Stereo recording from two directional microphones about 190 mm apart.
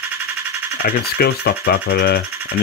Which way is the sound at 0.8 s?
55° left (ahead or behind).